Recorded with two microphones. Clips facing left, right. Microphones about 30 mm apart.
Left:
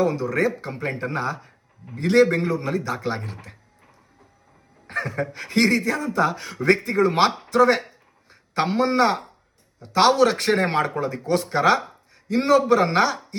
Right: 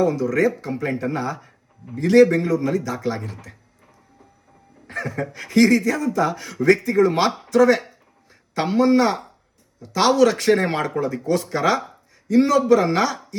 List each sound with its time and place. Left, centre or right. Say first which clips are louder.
0.0 s speech: right 2 dB; left
4.9 s speech: left 1 dB; left
7.5 s a sound: right 5 dB; left
9.8 s speech: right 1 dB; left